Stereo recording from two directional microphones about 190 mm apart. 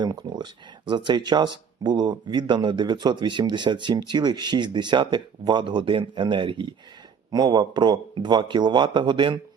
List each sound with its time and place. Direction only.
0.0 s speech: 25° right (ahead or behind)